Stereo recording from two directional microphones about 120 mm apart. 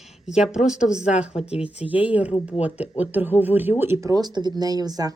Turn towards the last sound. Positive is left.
turn(degrees=-30)  # may be behind; listen again after turning